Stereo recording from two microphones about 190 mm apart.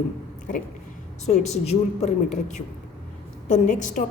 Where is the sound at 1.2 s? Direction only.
35° left (ahead or behind).